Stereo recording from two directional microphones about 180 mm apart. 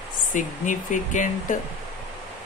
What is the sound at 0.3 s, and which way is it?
Speech, 45° left (ahead or behind).